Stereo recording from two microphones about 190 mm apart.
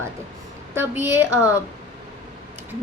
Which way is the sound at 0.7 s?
10° right (ahead or behind).